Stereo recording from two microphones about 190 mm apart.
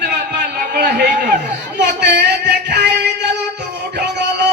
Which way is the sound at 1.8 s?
65° right (ahead or behind).